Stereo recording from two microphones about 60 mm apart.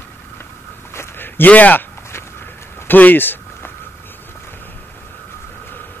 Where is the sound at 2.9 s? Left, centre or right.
Left.